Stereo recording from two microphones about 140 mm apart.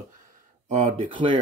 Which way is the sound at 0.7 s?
60° right (ahead or behind).